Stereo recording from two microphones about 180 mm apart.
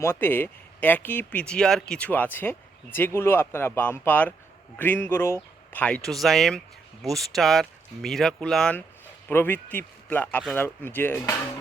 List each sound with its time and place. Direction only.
0.0 s speech: 10° left (ahead or behind)